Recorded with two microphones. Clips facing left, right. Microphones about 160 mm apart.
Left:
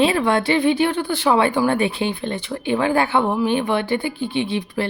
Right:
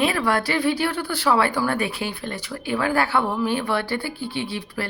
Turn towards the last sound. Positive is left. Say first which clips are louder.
# left 6 dB
turn(degrees=20)  # may be behind; listen again after turning